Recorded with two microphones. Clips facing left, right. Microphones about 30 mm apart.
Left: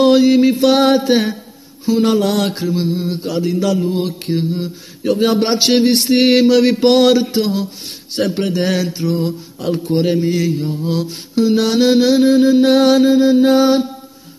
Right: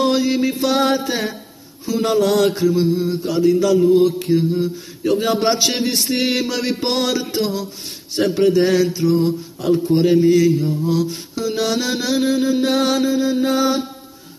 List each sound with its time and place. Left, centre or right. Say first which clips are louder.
0.0 s mantra: left 7 dB; left
1.9 s mantra: left 2 dB; left
10.1 s mantra: right 3 dB; left